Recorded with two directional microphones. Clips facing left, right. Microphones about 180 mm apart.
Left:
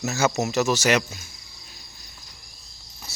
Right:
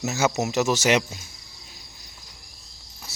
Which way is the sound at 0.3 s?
15° right (ahead or behind).